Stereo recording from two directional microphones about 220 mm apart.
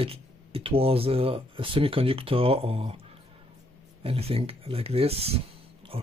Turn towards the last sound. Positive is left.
turn(degrees=-25)  # may be behind; listen again after turning